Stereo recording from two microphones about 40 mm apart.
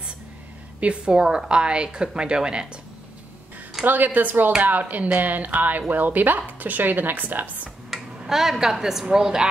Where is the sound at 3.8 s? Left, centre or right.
Right.